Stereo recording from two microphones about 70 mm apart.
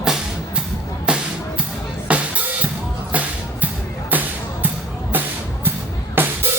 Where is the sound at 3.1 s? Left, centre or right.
Right.